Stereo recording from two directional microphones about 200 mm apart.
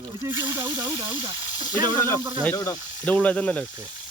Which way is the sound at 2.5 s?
20° left (ahead or behind).